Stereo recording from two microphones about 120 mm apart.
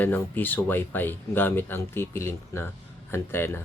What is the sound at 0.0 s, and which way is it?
Speech, 15° left (ahead or behind).